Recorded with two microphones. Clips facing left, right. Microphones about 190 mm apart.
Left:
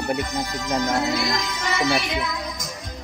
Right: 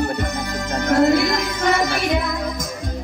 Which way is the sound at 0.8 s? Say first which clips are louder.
Right 10 dB; 60° right (ahead or behind).